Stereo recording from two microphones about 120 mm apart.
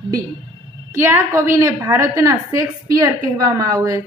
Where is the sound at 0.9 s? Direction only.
20° right (ahead or behind).